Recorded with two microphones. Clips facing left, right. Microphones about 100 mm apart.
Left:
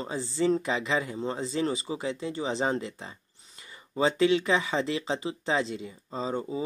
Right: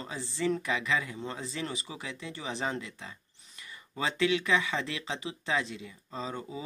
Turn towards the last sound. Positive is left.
turn(degrees=30)  # may be behind; listen again after turning